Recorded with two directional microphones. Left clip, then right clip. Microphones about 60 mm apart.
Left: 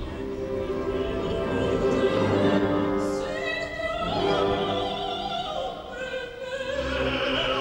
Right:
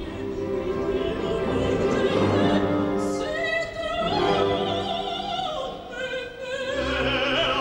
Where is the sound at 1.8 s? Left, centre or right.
Right.